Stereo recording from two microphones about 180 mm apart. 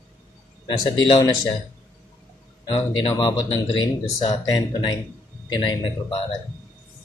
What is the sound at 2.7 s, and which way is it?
Speech, 30° left (ahead or behind).